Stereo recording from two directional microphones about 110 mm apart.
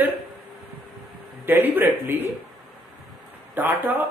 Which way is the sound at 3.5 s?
20° right (ahead or behind).